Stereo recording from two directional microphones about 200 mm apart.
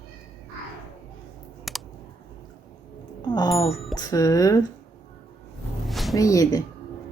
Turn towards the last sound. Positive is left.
turn(degrees=20)  # may be behind; listen again after turning